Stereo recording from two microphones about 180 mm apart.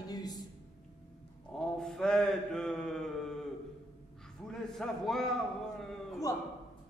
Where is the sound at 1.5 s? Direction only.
5° left (ahead or behind).